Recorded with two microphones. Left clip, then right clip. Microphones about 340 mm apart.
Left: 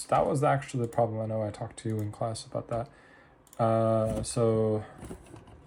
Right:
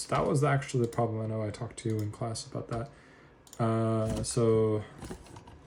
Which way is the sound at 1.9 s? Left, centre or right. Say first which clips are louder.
Left 3 dB; centre.